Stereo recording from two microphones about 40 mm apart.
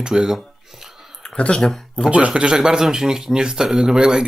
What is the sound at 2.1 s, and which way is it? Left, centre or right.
Speech, right.